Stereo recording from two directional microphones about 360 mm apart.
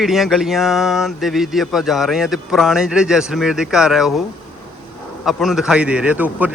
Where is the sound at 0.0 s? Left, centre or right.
Centre.